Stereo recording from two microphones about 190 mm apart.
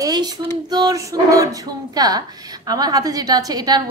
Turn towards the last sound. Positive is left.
turn(degrees=-20)  # may be behind; listen again after turning